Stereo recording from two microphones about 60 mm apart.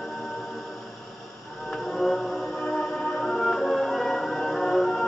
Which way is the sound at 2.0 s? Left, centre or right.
Centre.